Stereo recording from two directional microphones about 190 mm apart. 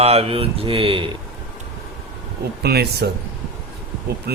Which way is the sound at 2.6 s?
55° right (ahead or behind).